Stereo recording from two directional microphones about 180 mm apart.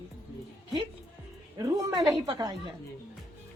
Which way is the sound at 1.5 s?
20° right (ahead or behind).